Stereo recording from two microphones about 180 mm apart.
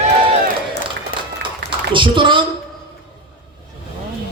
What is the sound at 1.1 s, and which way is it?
Run, 50° left (ahead or behind).